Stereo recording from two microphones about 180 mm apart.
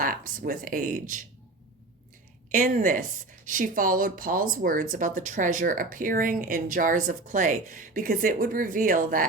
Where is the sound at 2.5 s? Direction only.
50° right (ahead or behind).